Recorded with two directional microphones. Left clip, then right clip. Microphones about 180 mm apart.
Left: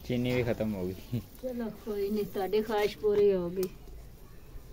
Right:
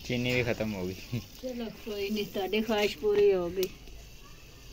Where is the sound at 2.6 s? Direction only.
30° right (ahead or behind).